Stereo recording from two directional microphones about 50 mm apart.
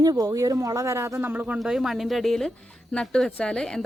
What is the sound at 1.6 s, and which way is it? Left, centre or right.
Speech, centre.